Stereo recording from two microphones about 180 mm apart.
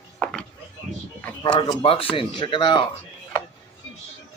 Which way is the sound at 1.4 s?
25° left (ahead or behind).